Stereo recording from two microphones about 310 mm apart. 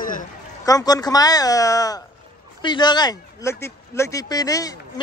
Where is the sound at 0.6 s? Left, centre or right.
Centre.